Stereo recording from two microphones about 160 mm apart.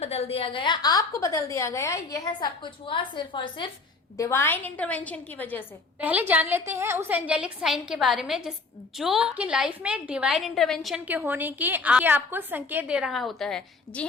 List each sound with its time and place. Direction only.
0.0 s a woman's voice: 40° left (ahead or behind); by 2.5 s 20° left (ahead or behind)
2.6 s a woman's voice: 30° left (ahead or behind)
4.2 s a woman's voice: 15° left (ahead or behind)
6.0 s a woman's voice: 10° right (ahead or behind)
11.0 s a woman's voice: 10° right (ahead or behind); by 14.1 s 5° left (ahead or behind)